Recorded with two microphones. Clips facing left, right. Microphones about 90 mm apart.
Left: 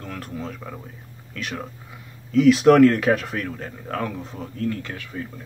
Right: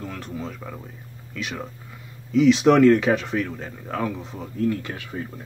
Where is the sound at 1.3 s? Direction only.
Centre (ahead or behind).